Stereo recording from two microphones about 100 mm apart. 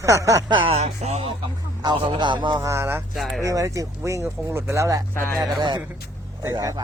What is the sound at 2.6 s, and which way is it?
Speech, 30° right (ahead or behind).